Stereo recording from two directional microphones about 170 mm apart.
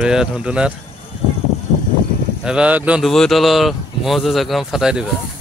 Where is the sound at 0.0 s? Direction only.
5° right (ahead or behind).